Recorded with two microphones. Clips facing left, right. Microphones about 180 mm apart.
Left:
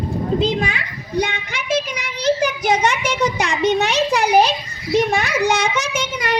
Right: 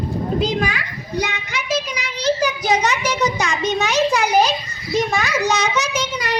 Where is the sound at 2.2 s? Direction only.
55° left (ahead or behind).